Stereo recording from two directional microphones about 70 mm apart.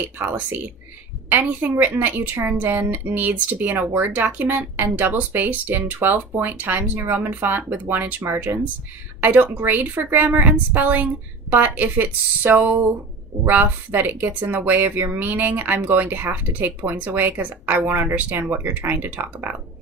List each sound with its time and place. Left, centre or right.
0.2 s speech: right